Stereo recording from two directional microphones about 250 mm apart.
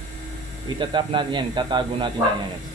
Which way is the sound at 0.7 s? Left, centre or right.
Centre.